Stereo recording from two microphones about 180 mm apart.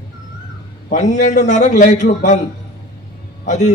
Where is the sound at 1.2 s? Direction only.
40° left (ahead or behind).